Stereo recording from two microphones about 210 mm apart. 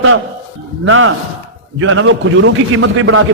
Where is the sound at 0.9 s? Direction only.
70° right (ahead or behind).